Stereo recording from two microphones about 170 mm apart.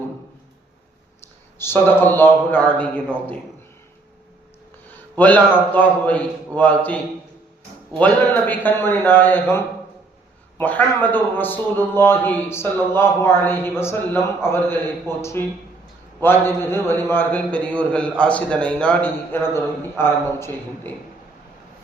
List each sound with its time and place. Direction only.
1.5 s a man's voice: 15° left (ahead or behind)
4.9 s a man's voice: 10° left (ahead or behind)